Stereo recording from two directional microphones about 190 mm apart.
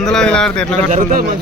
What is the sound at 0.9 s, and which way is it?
Speech, 45° right (ahead or behind).